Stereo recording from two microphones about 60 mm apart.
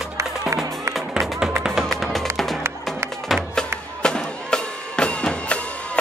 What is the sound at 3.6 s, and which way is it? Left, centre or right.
Music, centre.